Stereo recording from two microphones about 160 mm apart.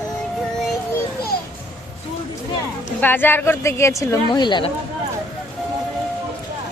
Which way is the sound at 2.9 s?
10° left (ahead or behind).